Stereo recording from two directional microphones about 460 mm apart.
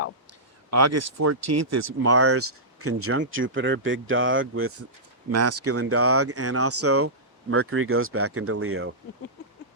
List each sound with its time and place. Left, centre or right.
0.7 s speech: right